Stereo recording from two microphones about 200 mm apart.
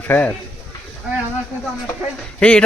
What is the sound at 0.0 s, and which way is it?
Speech, 10° left (ahead or behind).